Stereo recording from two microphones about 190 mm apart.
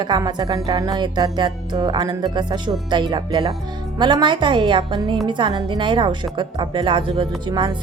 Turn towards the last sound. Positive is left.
turn(degrees=-25)  # may be behind; listen again after turning